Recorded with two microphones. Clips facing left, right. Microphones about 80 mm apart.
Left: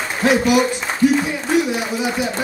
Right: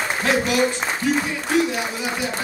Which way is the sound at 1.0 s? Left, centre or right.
Centre.